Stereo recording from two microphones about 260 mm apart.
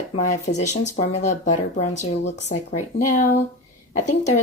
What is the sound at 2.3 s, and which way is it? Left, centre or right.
Speech, left.